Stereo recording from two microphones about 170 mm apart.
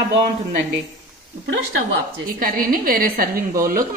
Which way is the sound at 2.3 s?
55° right (ahead or behind).